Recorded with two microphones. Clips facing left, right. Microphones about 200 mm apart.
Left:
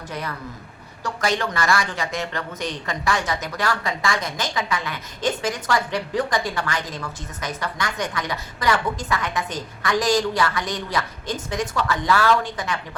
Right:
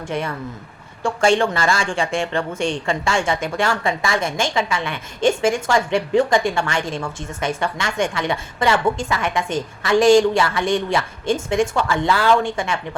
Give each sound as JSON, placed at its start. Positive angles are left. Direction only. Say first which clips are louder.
{"t": 0.1, "sound": "a woman's voice", "louder": "right 6 dB", "side_deg": -25}